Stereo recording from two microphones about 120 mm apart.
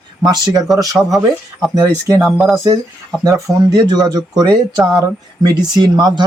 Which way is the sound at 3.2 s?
30° right (ahead or behind).